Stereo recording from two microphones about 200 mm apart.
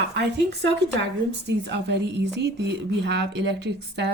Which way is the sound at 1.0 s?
60° right (ahead or behind).